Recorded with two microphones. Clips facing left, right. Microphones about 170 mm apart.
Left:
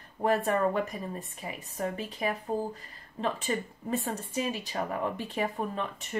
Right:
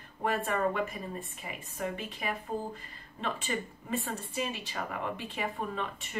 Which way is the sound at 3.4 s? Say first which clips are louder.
Left 4 dB; 40° left (ahead or behind).